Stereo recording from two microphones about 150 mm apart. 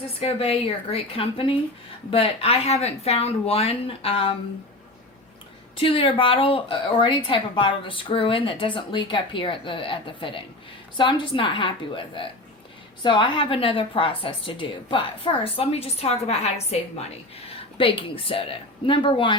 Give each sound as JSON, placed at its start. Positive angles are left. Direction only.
{"t": 0.2, "sound": "a woman's voice", "side_deg": 40}
{"t": 5.7, "sound": "a woman's voice", "side_deg": 35}